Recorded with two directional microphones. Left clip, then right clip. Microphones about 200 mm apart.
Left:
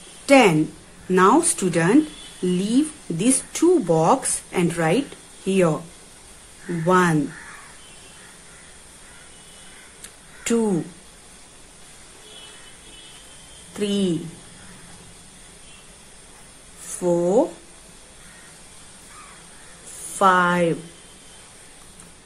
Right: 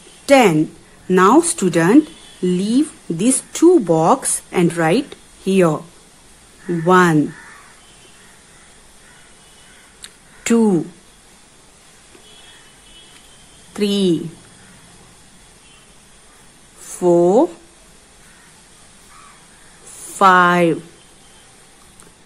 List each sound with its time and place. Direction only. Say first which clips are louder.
0.3 s speech: right 3 dB; 25° right (ahead or behind)
6.9 s speech: right 6 dB; 25° right (ahead or behind)
10.4 s speech: right 6 dB; 30° right (ahead or behind)
13.7 s speech: right 6 dB; 30° right (ahead or behind)
17.0 s a woman's voice: right 6 dB; 30° right (ahead or behind)
20.2 s a woman's voice: right 6 dB; 30° right (ahead or behind)